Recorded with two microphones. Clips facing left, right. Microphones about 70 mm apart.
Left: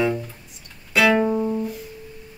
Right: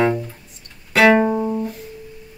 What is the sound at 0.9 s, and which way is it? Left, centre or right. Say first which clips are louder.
Music: right 4 dB; right.